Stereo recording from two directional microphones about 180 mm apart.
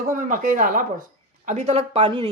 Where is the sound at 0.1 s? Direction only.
50° right (ahead or behind).